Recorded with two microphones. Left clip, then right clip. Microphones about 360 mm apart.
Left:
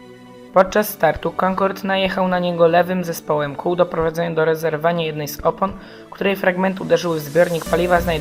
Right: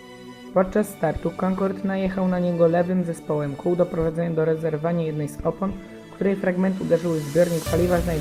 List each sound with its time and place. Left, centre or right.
0.5 s speech: left